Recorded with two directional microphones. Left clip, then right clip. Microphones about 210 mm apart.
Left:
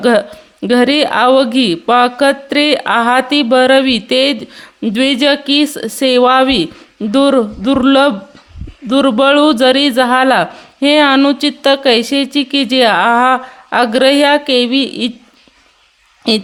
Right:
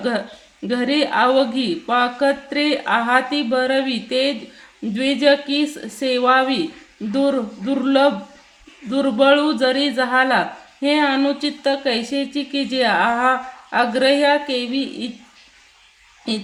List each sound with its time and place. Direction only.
0.6 s speech: 55° left (ahead or behind)
16.2 s speech: 55° left (ahead or behind)